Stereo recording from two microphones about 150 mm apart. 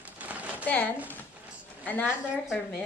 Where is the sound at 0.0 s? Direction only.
10° right (ahead or behind).